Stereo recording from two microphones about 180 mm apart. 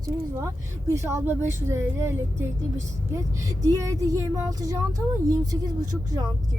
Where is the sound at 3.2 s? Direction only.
20° right (ahead or behind).